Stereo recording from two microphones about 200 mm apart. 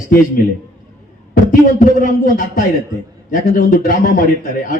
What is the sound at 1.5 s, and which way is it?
Speech, 40° left (ahead or behind).